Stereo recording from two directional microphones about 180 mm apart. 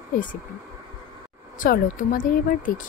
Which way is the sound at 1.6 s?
50° left (ahead or behind).